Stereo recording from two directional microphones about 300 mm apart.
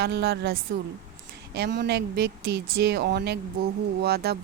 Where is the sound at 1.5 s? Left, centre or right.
Right.